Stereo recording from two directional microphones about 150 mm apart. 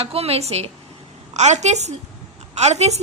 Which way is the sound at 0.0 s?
40° right (ahead or behind).